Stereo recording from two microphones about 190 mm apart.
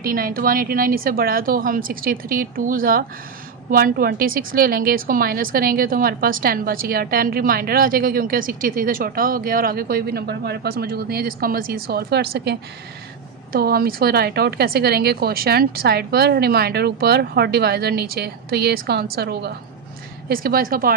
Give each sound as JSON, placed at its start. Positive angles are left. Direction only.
{"t": 0.0, "sound": "a woman's voice", "side_deg": -50}